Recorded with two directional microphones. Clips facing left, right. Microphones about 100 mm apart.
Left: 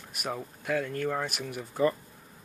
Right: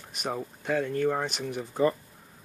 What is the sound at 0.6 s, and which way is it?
Speech, 15° right (ahead or behind).